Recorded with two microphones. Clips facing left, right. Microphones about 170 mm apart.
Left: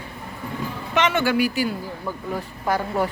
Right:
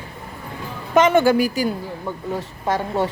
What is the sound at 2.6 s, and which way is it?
Speech, 25° right (ahead or behind).